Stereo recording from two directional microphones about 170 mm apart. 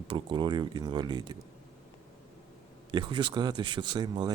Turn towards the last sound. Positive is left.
turn(degrees=-25)  # may be behind; listen again after turning